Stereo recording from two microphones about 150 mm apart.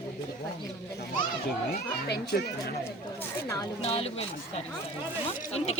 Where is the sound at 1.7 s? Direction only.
90° left.